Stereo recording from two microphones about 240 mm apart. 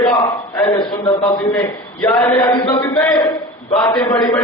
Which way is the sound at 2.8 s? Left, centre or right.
Centre.